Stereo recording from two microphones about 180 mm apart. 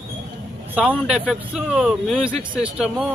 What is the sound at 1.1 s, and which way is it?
Speech, 5° right (ahead or behind).